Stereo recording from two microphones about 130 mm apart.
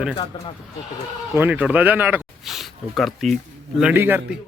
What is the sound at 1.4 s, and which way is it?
Speech, 10° right (ahead or behind).